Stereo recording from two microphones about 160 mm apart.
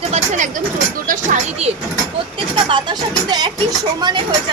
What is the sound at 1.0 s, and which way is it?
Speech, 50° right (ahead or behind).